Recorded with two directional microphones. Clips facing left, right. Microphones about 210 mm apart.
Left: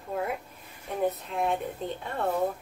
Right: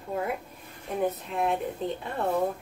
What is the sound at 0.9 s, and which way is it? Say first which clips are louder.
A woman's voice: even; centre (ahead or behind).